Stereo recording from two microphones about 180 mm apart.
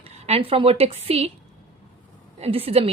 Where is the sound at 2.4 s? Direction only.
35° right (ahead or behind).